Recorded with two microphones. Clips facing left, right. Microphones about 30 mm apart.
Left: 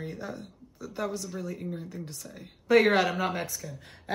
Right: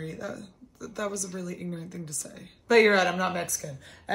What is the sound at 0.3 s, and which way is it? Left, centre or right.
Speech, left.